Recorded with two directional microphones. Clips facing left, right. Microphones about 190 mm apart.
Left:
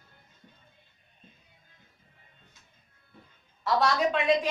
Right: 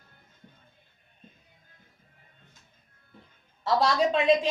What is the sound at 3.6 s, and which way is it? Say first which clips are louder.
Speech: right 1 dB; 30° right (ahead or behind).